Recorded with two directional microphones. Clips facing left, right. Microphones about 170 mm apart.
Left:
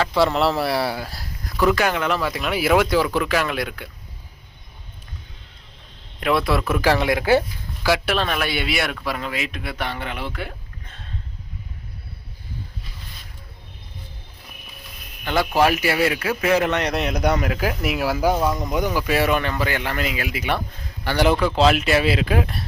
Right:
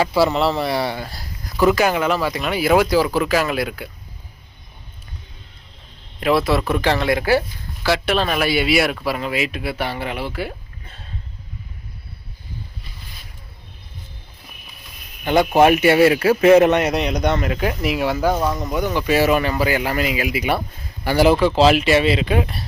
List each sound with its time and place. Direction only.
0.0 s speech: 5° right (ahead or behind)
6.1 s speech: centre (ahead or behind)
8.1 s speech: 5° right (ahead or behind)
15.2 s speech: 20° right (ahead or behind)
16.8 s speech: centre (ahead or behind)
18.6 s speech: 15° left (ahead or behind)
18.9 s speech: centre (ahead or behind)